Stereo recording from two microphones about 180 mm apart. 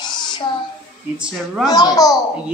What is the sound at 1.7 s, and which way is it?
Speech, 20° left (ahead or behind).